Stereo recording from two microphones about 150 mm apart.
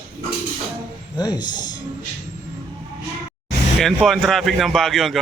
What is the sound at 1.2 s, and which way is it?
Speech, 30° left (ahead or behind).